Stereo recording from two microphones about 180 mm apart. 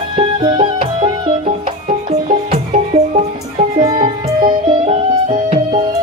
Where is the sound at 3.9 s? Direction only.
30° right (ahead or behind).